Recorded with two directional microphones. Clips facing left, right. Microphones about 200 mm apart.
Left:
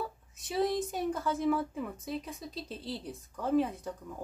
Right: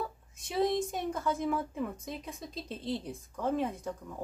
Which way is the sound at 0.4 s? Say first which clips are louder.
Right 1 dB; centre (ahead or behind).